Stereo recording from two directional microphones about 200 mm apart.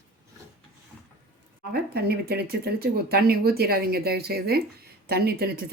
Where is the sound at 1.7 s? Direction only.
50° right (ahead or behind).